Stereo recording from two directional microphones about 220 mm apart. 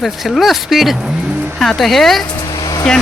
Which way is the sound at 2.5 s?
15° left (ahead or behind).